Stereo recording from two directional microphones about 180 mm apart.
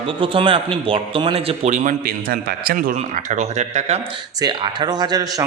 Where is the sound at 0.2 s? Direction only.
30° right (ahead or behind).